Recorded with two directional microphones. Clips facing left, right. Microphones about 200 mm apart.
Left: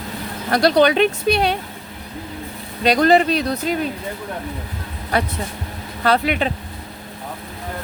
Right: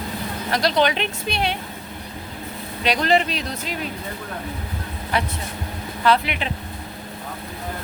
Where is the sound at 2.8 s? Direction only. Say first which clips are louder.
Left 5 dB; 40° left (ahead or behind).